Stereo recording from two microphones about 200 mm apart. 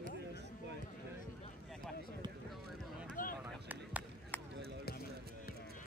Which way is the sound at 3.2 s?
45° left (ahead or behind).